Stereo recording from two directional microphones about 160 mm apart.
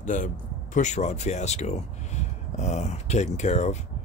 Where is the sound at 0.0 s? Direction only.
50° left (ahead or behind).